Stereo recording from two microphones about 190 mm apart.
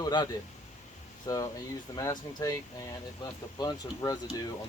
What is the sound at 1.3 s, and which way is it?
Speech, 20° left (ahead or behind).